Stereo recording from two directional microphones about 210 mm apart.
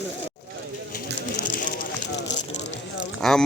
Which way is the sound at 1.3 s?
35° left (ahead or behind).